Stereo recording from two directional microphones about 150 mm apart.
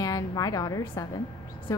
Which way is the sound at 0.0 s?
25° left (ahead or behind).